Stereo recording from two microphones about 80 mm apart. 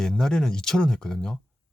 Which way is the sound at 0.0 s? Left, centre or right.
Centre.